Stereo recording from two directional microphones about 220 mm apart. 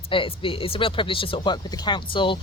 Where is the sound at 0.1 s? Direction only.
25° left (ahead or behind).